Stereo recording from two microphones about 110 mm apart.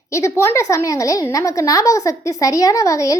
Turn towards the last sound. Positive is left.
turn(degrees=30)  # may be behind; listen again after turning